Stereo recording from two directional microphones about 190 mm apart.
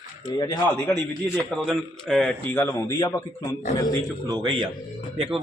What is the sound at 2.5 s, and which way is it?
Speech, 15° left (ahead or behind).